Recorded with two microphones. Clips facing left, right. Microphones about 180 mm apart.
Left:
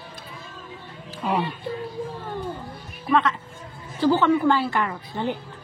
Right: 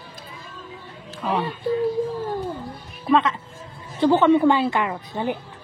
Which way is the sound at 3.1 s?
20° right (ahead or behind).